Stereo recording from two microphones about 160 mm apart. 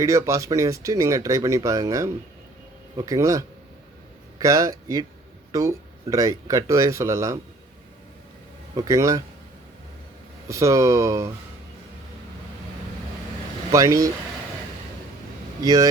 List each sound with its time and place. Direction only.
0.0 s speech: 20° right (ahead or behind)
8.7 s speech: 20° right (ahead or behind)
10.5 s speech: 20° right (ahead or behind)
13.7 s speech: 20° right (ahead or behind)
15.6 s speech: 20° right (ahead or behind)